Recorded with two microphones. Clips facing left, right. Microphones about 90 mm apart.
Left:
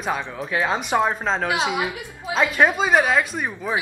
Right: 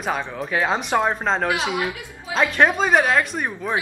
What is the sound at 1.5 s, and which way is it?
Speech, 25° left (ahead or behind).